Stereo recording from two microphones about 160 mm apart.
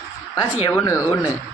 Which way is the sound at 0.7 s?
15° left (ahead or behind).